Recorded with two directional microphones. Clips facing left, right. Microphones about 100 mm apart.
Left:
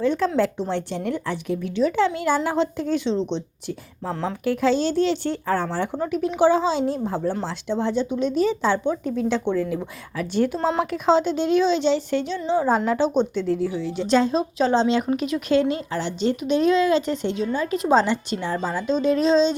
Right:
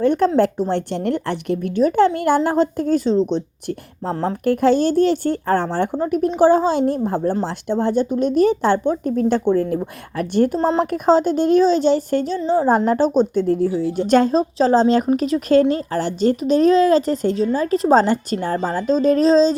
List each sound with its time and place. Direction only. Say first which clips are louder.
0.0 s speech: right 5 dB; 55° right (ahead or behind); by 4.4 s 35° right (ahead or behind)
4.4 s speech: right 5 dB; 50° right (ahead or behind)
7.2 s speech: right 5 dB; 40° right (ahead or behind)
7.4 s speech: right 4 dB; 50° right (ahead or behind)
14.3 s speech: right 5 dB; 35° right (ahead or behind)